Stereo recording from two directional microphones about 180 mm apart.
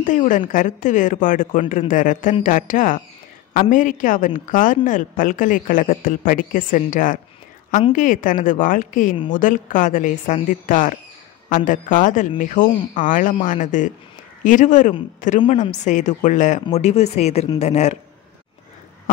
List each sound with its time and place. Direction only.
0.0 s a woman's voice: 45° left (ahead or behind)